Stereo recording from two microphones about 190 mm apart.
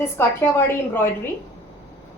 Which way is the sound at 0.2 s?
10° left (ahead or behind).